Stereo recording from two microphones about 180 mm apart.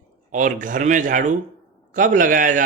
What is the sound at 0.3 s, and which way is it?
A man's voice, 45° right (ahead or behind).